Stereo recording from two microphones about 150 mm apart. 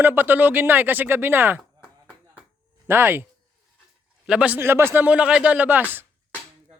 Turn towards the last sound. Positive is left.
turn(degrees=-15)  # may be behind; listen again after turning